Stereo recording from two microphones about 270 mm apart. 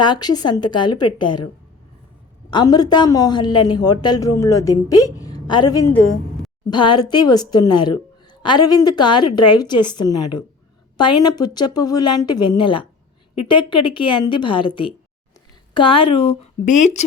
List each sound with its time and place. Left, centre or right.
0.0 s speech: centre
2.5 s a woman's voice: centre